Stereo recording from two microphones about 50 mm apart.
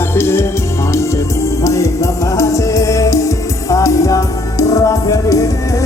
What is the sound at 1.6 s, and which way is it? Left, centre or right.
Music, left.